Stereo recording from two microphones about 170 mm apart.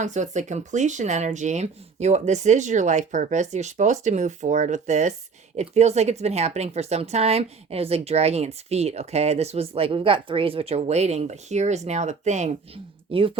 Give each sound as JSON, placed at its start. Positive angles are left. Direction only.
{"t": 0.0, "sound": "a woman's voice", "side_deg": -45}